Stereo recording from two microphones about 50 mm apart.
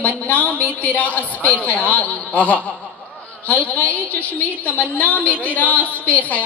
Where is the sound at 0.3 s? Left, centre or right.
Left.